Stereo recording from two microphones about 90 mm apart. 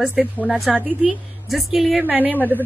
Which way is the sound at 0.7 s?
15° right (ahead or behind).